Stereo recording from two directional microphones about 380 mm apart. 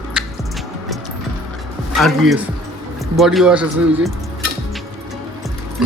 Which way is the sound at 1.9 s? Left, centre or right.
Centre.